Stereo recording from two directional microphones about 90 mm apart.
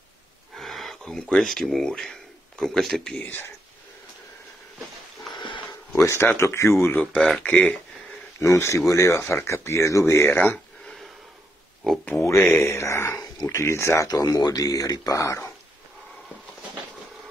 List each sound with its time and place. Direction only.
0.6 s wild animals: centre (ahead or behind)
1.3 s speech: centre (ahead or behind)
3.2 s speech: 20° left (ahead or behind)
5.3 s sniff: 65° left (ahead or behind)
5.9 s speech: 30° left (ahead or behind)
7.4 s speech: 15° left (ahead or behind)
8.4 s speech: 30° left (ahead or behind)
11.8 s speech: centre (ahead or behind)
12.4 s speech: 25° left (ahead or behind)
13.2 s a sound: 45° left (ahead or behind)
13.6 s speech: 30° left (ahead or behind)
14.0 s speech: 45° left (ahead or behind)